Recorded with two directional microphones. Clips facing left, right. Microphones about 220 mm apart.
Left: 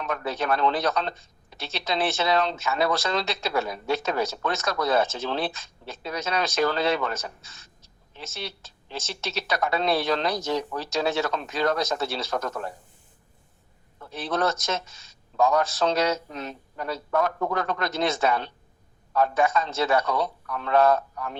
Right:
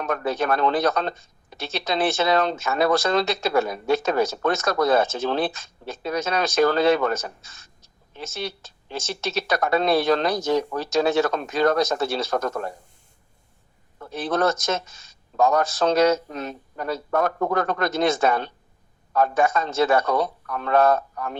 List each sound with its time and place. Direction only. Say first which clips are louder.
0.0 s speech: right 4 dB; 50° right (ahead or behind)
14.0 s speech: right 4 dB; 50° right (ahead or behind)